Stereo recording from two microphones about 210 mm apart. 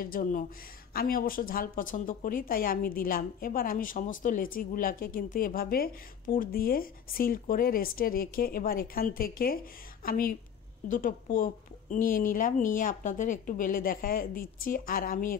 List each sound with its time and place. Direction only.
0.0 s a woman's voice: 45° left (ahead or behind)